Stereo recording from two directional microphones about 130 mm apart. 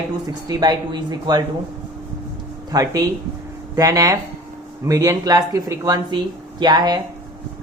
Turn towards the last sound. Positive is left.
turn(degrees=-30)  # may be behind; listen again after turning